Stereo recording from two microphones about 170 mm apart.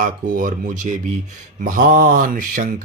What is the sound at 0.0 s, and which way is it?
Speech, 50° right (ahead or behind).